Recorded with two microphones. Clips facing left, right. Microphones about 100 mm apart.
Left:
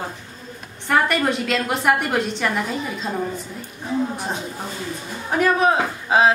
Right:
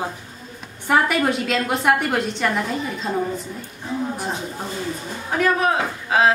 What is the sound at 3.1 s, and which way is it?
Speech, 10° right (ahead or behind).